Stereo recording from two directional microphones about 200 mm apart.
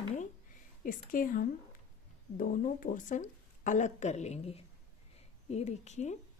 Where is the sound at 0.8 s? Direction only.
45° left (ahead or behind).